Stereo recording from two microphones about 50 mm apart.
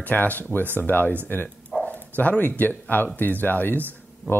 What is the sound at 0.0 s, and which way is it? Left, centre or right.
Speech, left.